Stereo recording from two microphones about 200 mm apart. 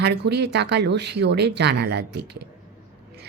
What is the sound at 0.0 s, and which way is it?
Speech, 55° right (ahead or behind).